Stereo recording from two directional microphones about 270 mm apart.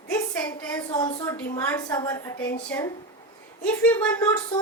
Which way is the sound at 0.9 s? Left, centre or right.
Centre.